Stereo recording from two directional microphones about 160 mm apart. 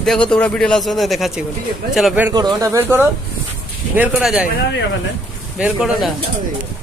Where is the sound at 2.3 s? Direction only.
25° right (ahead or behind).